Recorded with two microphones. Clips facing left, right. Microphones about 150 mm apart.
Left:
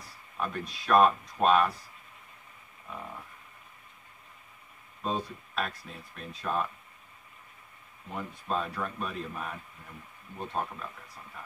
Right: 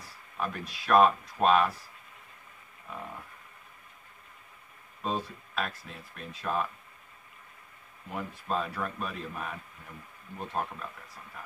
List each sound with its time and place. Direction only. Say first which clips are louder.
0.0 s speech: even; centre (ahead or behind)
5.0 s speech: even; centre (ahead or behind)
8.1 s speech: even; centre (ahead or behind)